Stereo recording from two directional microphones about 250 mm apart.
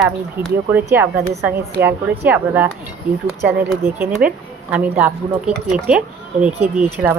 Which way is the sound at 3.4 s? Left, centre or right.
Centre.